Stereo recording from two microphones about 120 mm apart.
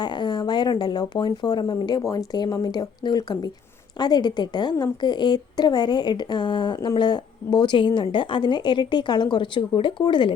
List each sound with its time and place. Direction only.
0.0 s a woman's voice: 40° left (ahead or behind)